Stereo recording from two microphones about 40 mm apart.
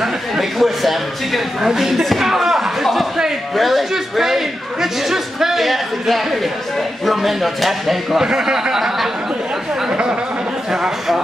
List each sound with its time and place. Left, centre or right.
0.0 s a sound: centre
7.1 s speech: centre
8.4 s speech: centre
9.8 s speech: centre